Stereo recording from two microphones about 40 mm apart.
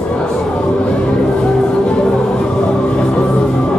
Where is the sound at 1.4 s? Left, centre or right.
Centre.